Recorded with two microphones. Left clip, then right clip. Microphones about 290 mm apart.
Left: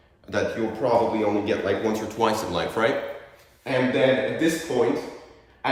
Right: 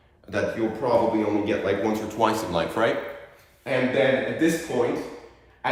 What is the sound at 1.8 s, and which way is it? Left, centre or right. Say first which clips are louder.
A man's voice: even; centre.